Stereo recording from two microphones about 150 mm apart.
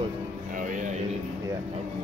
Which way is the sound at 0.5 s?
60° right (ahead or behind).